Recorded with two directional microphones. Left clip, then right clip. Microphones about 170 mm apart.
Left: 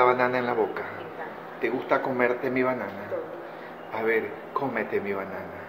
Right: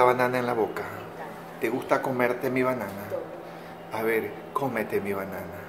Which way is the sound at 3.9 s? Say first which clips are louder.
Left 1 dB; 15° right (ahead or behind).